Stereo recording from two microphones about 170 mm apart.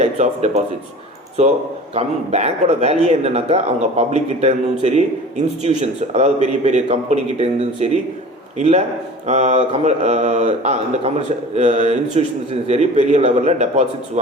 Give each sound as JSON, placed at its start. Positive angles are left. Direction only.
{"t": 0.0, "sound": "speech", "side_deg": -40}
{"t": 2.0, "sound": "speech", "side_deg": -40}